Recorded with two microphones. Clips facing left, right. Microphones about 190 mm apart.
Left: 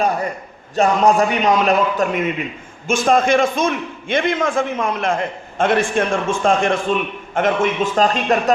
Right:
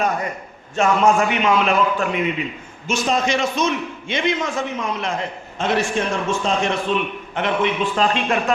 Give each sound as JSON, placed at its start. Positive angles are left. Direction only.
{"t": 0.8, "sound": "a man's voice", "side_deg": 35}